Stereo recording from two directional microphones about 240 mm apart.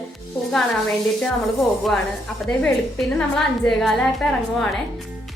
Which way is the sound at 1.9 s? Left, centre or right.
Centre.